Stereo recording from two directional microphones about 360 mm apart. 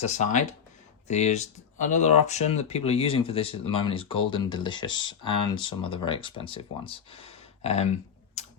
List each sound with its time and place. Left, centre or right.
0.0 s speech: centre